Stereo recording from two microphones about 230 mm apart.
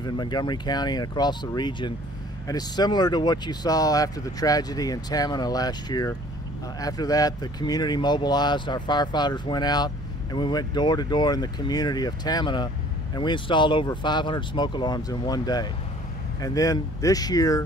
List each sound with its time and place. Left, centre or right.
0.0 s speech: centre